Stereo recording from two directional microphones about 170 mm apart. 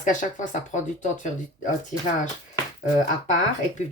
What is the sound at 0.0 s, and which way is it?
Speech, 50° left (ahead or behind).